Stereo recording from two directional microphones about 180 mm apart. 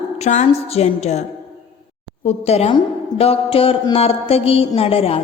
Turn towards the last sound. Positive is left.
turn(degrees=30)  # may be behind; listen again after turning